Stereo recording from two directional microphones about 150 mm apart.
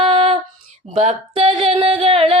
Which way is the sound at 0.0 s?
40° right (ahead or behind).